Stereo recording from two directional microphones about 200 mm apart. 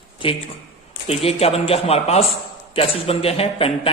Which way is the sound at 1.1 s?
30° left (ahead or behind).